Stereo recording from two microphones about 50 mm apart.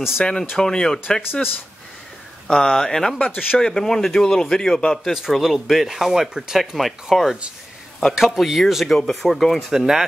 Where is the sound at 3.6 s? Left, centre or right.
Centre.